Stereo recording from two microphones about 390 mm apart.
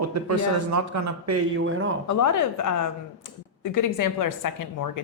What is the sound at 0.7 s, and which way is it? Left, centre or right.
Speech, right.